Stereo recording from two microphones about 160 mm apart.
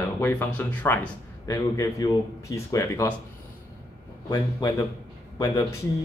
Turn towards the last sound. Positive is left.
turn(degrees=20)  # may be behind; listen again after turning